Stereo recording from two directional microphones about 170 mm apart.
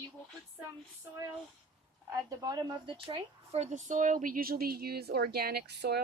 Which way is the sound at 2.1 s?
20° right (ahead or behind).